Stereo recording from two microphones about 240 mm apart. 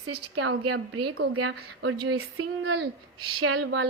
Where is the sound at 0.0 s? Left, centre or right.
Right.